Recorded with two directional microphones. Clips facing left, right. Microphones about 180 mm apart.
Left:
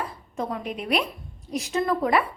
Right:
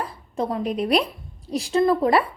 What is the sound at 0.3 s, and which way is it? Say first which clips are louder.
Speech: right 6 dB; 35° right (ahead or behind).